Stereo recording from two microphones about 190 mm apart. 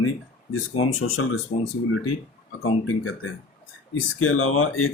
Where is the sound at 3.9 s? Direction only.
90° left.